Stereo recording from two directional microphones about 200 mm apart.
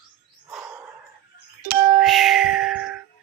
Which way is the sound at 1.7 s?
50° right (ahead or behind).